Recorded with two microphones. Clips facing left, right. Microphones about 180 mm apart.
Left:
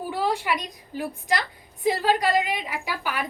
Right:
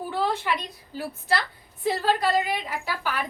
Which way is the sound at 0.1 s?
10° left (ahead or behind).